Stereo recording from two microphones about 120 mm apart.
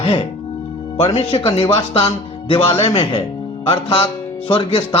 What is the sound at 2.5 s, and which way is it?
Speech, 50° left (ahead or behind).